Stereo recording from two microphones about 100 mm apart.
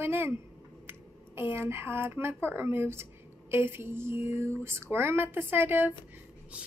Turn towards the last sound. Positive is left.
turn(degrees=-20)  # may be behind; listen again after turning